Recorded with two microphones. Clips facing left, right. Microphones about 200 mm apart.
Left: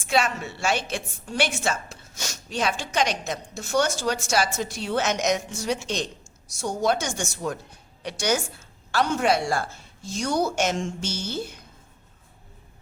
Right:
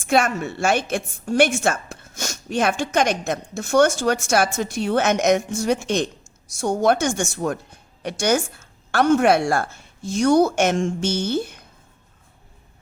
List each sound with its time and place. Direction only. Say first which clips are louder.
0.1 s a woman's voice: right 5 dB; 50° right (ahead or behind)